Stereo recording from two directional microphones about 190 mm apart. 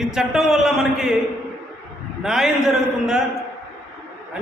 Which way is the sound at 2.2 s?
Centre (ahead or behind).